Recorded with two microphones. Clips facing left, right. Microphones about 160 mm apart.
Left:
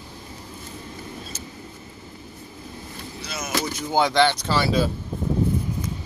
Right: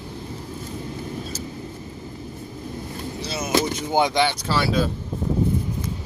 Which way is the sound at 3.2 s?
35° right (ahead or behind).